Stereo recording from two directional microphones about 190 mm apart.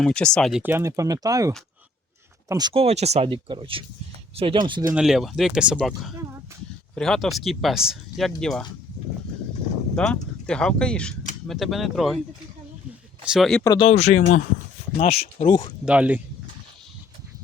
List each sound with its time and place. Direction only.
0.0 s speech: 5° left (ahead or behind)
0.6 s speech: 15° right (ahead or behind)
4.9 s speech: 5° right (ahead or behind)
9.9 s speech: 5° left (ahead or behind)
13.2 s speech: centre (ahead or behind)
13.7 s speech: 25° left (ahead or behind)
15.9 s speech: 5° right (ahead or behind)